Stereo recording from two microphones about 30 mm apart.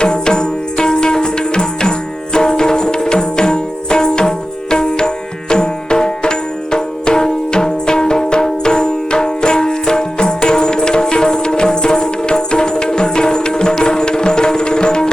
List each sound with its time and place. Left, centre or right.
0.0 s music: left